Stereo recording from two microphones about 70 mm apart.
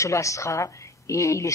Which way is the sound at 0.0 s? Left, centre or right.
Left.